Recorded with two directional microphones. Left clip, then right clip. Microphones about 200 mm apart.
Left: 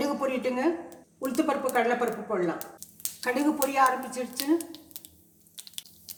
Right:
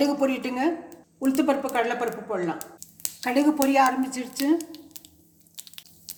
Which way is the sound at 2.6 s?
10° right (ahead or behind).